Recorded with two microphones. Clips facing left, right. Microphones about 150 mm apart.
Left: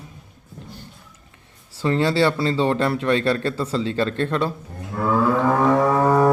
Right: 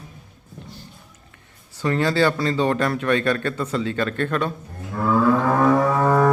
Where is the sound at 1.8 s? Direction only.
25° left (ahead or behind).